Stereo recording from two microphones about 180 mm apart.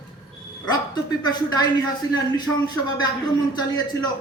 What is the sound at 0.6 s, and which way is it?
Speech, 20° left (ahead or behind).